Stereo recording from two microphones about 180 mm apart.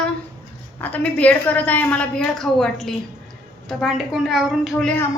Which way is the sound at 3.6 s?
Centre (ahead or behind).